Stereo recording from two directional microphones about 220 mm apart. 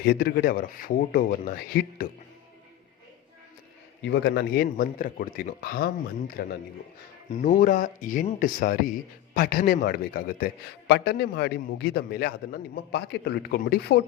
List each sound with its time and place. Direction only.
0.0 s speech: 45° left (ahead or behind)
4.0 s speech: 50° left (ahead or behind)